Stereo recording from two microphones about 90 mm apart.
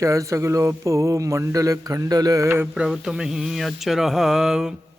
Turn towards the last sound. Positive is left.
turn(degrees=-5)  # may be behind; listen again after turning